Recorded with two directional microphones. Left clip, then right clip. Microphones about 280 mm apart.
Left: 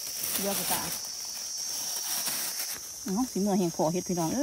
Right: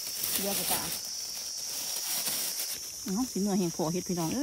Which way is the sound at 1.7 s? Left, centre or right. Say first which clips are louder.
Even; centre.